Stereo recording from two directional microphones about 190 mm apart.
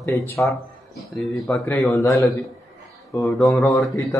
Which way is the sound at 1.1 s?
Centre (ahead or behind).